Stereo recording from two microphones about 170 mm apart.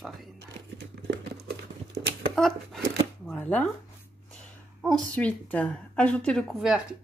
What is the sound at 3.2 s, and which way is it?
Chopping, 10° left (ahead or behind).